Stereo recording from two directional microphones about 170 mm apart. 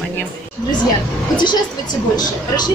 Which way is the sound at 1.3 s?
25° left (ahead or behind).